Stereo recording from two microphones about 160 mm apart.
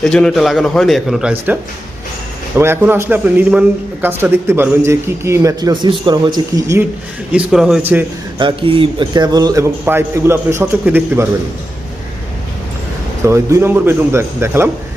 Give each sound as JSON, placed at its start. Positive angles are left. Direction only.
{"t": 0.0, "sound": "a man's voice", "side_deg": 5}
{"t": 2.6, "sound": "a man's voice", "side_deg": -15}
{"t": 7.3, "sound": "a man's voice", "side_deg": -5}
{"t": 8.4, "sound": "a man's voice", "side_deg": -30}
{"t": 13.2, "sound": "a man's voice", "side_deg": -15}